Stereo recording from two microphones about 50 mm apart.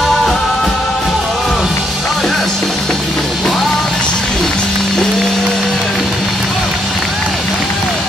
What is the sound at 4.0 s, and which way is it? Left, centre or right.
Music, centre.